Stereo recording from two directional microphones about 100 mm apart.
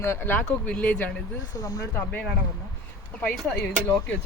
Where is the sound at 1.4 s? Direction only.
40° left (ahead or behind).